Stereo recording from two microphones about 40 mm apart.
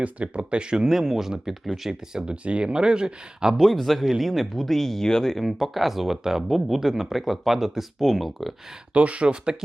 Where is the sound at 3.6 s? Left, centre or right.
Centre.